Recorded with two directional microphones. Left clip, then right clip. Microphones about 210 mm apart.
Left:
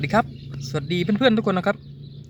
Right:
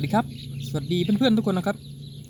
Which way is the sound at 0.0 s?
10° left (ahead or behind).